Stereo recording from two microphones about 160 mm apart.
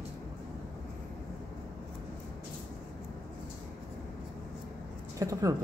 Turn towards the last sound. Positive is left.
turn(degrees=-20)  # may be behind; listen again after turning